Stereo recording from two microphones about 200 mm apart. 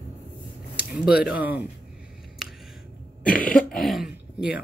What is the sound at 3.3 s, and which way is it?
Throat clearing, 45° left (ahead or behind).